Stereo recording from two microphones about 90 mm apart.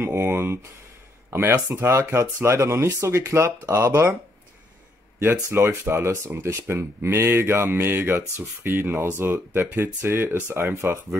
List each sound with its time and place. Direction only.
0.0 s speech: 25° right (ahead or behind)
5.2 s speech: 25° right (ahead or behind)